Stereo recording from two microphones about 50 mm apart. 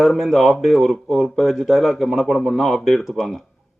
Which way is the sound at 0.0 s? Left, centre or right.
Centre.